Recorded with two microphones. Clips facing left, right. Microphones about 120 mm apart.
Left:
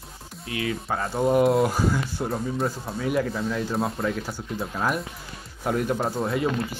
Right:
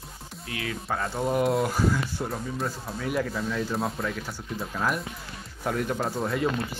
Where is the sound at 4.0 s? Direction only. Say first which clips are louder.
Left 4 dB; 25° left (ahead or behind).